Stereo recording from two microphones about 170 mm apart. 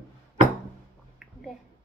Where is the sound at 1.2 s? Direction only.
Centre (ahead or behind).